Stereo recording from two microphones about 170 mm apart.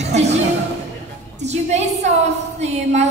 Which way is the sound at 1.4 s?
40° right (ahead or behind).